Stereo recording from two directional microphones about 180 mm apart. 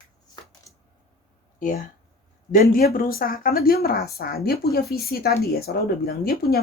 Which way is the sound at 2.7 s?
55° left (ahead or behind).